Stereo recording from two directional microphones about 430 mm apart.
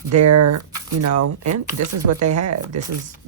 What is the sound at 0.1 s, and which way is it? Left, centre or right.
Speech, right.